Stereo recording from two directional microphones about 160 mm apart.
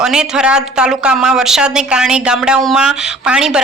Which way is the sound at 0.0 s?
5° right (ahead or behind).